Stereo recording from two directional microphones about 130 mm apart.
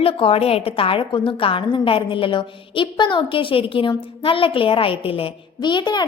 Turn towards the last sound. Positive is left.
turn(degrees=35)  # may be behind; listen again after turning